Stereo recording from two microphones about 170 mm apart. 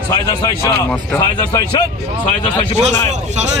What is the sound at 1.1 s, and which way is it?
Speech, 20° left (ahead or behind).